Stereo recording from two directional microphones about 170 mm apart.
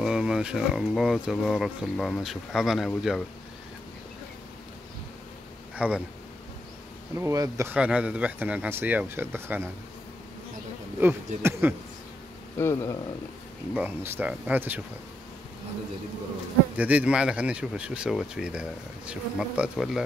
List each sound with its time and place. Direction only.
0.0 s speech: 5° right (ahead or behind)
5.8 s speech: 5° right (ahead or behind)
7.2 s speech: 15° right (ahead or behind)
11.0 s speech: 15° right (ahead or behind)
12.5 s speech: 15° left (ahead or behind)
13.7 s speech: 10° right (ahead or behind)
16.7 s speech: 10° right (ahead or behind)